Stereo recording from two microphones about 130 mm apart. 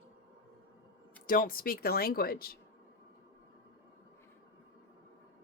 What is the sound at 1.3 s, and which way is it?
Speech, 90° left.